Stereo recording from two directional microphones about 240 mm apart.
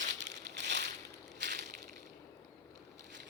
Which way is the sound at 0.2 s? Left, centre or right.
Right.